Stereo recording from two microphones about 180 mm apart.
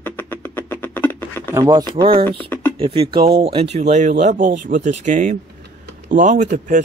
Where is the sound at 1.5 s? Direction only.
20° right (ahead or behind).